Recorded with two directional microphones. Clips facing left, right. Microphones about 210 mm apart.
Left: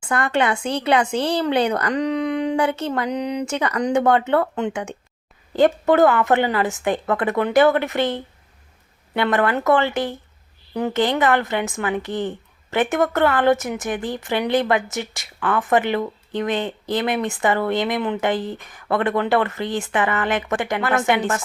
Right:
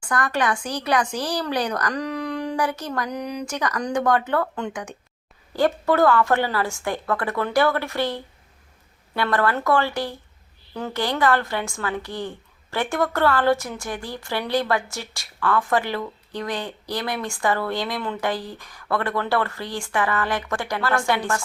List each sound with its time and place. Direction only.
0.0 s a woman's voice: 25° left (ahead or behind)